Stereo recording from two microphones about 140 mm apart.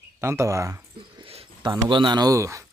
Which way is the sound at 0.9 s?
40° right (ahead or behind).